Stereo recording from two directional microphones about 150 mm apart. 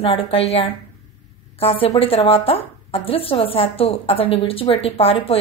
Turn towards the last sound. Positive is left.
turn(degrees=40)  # may be behind; listen again after turning